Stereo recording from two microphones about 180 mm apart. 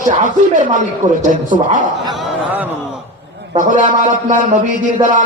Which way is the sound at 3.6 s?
45° right (ahead or behind).